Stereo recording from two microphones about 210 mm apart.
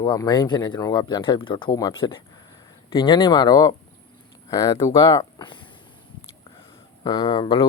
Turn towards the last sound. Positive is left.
turn(degrees=25)  # may be behind; listen again after turning